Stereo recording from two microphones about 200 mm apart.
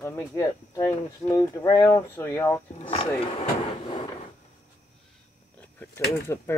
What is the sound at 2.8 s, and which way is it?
Speech, 25° left (ahead or behind).